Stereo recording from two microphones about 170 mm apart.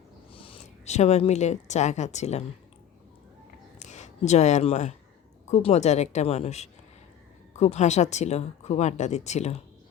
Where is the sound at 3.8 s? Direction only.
45° left (ahead or behind).